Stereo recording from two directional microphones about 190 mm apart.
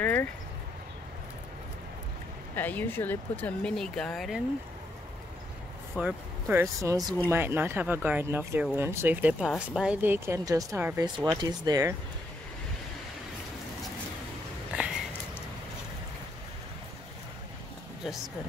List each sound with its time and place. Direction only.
0.0 s a sound: 10° left (ahead or behind)
2.5 s speech: 10° left (ahead or behind)
5.9 s speech: 5° right (ahead or behind)
14.7 s sniff: 5° right (ahead or behind)